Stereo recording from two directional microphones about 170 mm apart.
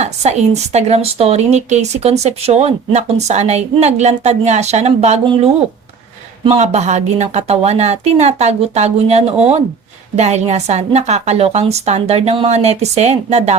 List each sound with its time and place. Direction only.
0.0 s a woman's voice: 40° right (ahead or behind)